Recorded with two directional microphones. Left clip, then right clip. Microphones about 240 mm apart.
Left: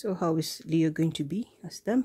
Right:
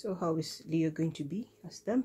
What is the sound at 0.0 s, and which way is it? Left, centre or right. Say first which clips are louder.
Speech: left 5 dB; left.